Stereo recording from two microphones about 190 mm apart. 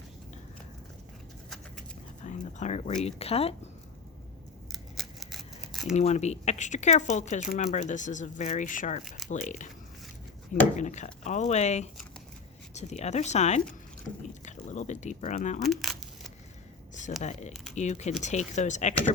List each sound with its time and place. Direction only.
2.2 s speech: 40° left (ahead or behind)
4.7 s scissors: centre (ahead or behind)
6.0 s speech: 35° left (ahead or behind)
9.0 s speech: centre (ahead or behind)
9.3 s speech: 40° left (ahead or behind)
10.8 s speech: 40° left (ahead or behind)
15.6 s speech: centre (ahead or behind)
16.9 s a sound: 40° left (ahead or behind)
17.5 s speech: centre (ahead or behind)
17.7 s speech: 35° left (ahead or behind)